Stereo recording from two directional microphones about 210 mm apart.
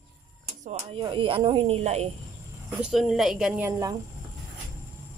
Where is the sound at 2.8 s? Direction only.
5° right (ahead or behind).